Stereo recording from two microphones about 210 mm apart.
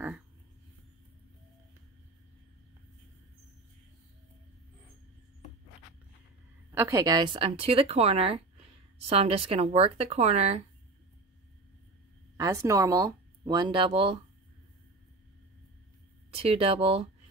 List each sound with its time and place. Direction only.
6.7 s a woman's voice: 15° right (ahead or behind); by 10.6 s 30° right (ahead or behind)
12.4 s speech: 15° right (ahead or behind)
16.3 s a woman's voice: 25° right (ahead or behind)